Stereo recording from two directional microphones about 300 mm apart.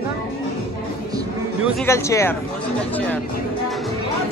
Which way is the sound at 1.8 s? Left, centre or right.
Centre.